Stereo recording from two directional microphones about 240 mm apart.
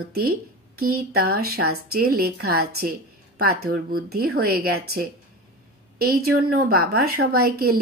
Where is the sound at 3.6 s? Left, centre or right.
Right.